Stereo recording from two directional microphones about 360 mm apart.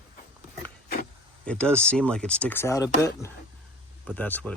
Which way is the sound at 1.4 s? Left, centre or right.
Centre.